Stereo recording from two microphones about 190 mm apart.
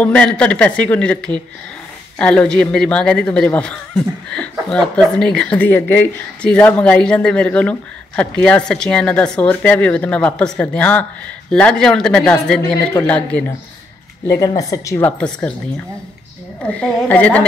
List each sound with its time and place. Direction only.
0.0 s speech: 5° left (ahead or behind)
14.2 s speech: 15° left (ahead or behind)
16.6 s speech: 5° left (ahead or behind)